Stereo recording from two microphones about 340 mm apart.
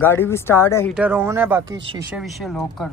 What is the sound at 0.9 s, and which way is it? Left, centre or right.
Speech, centre.